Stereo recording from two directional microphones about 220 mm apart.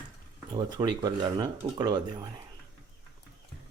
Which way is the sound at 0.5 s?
20° right (ahead or behind).